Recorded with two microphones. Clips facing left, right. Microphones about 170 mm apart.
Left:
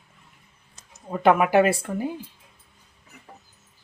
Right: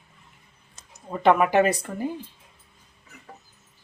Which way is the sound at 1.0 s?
5° left (ahead or behind).